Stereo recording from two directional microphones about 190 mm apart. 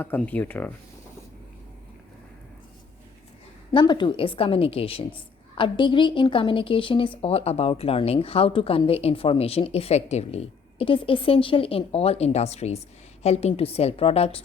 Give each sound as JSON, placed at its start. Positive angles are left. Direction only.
{"t": 0.0, "sound": "speech", "side_deg": 10}
{"t": 3.7, "sound": "a woman's voice", "side_deg": 25}